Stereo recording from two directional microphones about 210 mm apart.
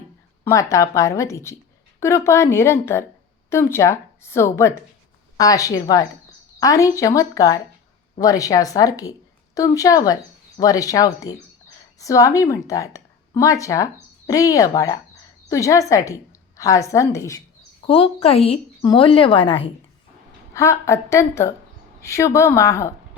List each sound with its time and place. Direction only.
0.4 s a woman's voice: 15° left (ahead or behind)
17.8 s a woman's voice: 25° left (ahead or behind)